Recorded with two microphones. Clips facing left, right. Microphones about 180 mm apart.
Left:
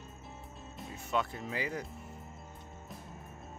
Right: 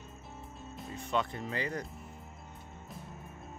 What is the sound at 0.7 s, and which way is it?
Speech, 5° left (ahead or behind).